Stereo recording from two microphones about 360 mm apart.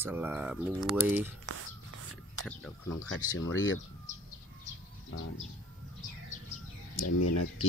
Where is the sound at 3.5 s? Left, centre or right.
Left.